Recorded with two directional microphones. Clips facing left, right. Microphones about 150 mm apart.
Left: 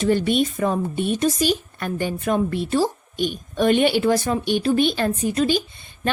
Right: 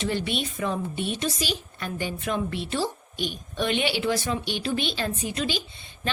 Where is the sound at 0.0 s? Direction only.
45° left (ahead or behind).